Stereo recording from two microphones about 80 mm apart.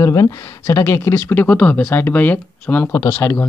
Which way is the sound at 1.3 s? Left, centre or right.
Left.